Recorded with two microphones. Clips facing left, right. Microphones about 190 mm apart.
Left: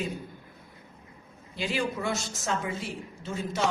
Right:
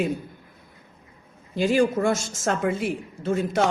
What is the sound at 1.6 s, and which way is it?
A woman's voice, 45° right (ahead or behind).